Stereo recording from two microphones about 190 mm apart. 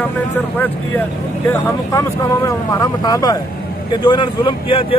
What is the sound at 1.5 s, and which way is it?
Speech, 15° left (ahead or behind).